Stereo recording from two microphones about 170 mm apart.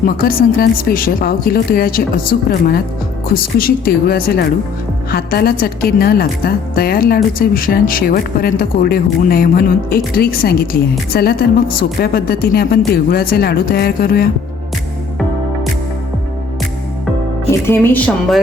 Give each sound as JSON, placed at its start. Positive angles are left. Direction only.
{"t": 0.0, "sound": "a woman's voice", "side_deg": 60}
{"t": 17.5, "sound": "speech", "side_deg": 10}